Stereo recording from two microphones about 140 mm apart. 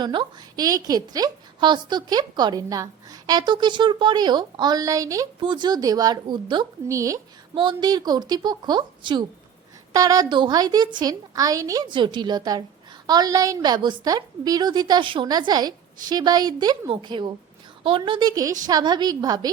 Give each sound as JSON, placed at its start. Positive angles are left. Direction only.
{"t": 0.0, "sound": "a woman's voice", "side_deg": -35}
{"t": 6.8, "sound": "a woman's voice", "side_deg": -20}
{"t": 7.5, "sound": "a woman's voice", "side_deg": -35}